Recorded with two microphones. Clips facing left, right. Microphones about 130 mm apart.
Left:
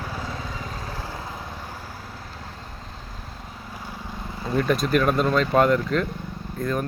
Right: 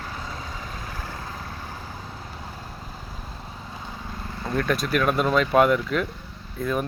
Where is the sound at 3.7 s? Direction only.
10° left (ahead or behind).